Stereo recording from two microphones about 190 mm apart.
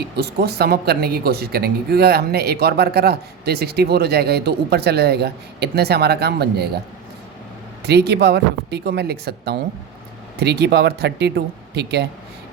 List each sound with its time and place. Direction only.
0.2 s speech: 55° right (ahead or behind)
7.9 s speech: 60° right (ahead or behind)